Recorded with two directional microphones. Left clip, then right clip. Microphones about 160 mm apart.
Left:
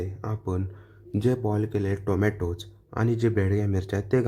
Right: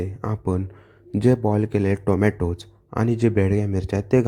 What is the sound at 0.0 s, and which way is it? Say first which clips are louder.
Speech: right 6 dB; 25° right (ahead or behind).